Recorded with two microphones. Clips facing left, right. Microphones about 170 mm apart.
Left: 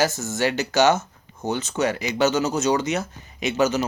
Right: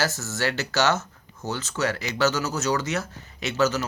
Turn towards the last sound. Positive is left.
turn(degrees=15)  # may be behind; listen again after turning